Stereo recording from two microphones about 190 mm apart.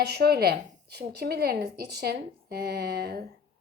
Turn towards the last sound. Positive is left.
turn(degrees=-55)  # may be behind; listen again after turning